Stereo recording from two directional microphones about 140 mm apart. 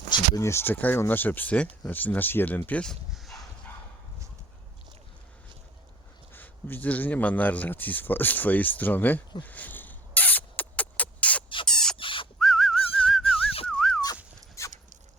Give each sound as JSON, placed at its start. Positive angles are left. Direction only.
{"t": 0.1, "sound": "speech", "side_deg": 20}
{"t": 6.3, "sound": "speech", "side_deg": 15}
{"t": 9.4, "sound": "rodents", "side_deg": 10}
{"t": 11.4, "sound": "rodents", "side_deg": 35}
{"t": 11.7, "sound": "rodents", "side_deg": 5}
{"t": 11.9, "sound": "a sound", "side_deg": 40}
{"t": 12.4, "sound": "whistling", "side_deg": 0}
{"t": 13.7, "sound": "dog", "side_deg": 0}
{"t": 14.6, "sound": "dog", "side_deg": 20}